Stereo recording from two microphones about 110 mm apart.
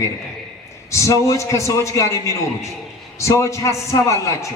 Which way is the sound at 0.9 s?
30° left (ahead or behind).